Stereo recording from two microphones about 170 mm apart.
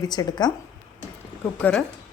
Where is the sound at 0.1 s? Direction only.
25° left (ahead or behind).